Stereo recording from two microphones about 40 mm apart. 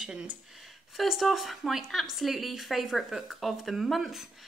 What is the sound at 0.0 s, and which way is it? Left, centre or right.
Speech, centre.